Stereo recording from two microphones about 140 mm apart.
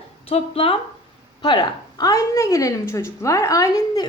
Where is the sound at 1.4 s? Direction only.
30° left (ahead or behind).